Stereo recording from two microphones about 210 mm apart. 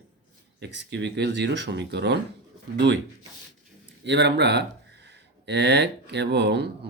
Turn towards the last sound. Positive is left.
turn(degrees=-55)  # may be behind; listen again after turning